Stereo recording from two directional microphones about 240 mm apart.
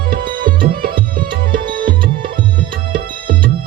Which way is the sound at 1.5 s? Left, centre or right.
Right.